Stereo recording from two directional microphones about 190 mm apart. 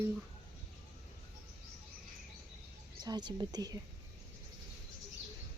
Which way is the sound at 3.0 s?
20° right (ahead or behind).